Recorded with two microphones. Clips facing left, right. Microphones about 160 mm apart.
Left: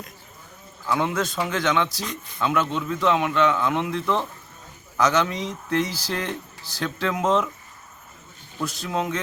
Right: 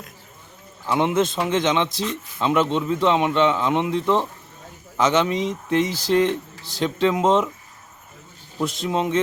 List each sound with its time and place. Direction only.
0.9 s a man's voice: 20° right (ahead or behind)
8.6 s a man's voice: 25° right (ahead or behind)